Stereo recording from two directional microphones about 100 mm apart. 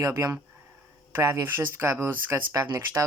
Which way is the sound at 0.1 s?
25° right (ahead or behind).